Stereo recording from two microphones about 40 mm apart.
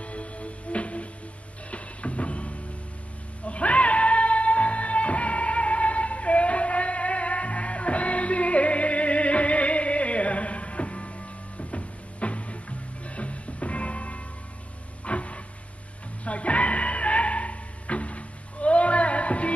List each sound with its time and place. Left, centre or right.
0.0 s music: left
15.0 s a sound: left
16.3 s music: left